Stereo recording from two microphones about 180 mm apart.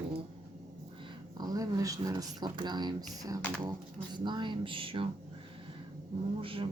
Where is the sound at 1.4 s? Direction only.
20° right (ahead or behind).